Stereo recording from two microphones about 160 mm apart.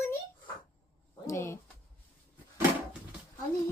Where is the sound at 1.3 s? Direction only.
15° left (ahead or behind).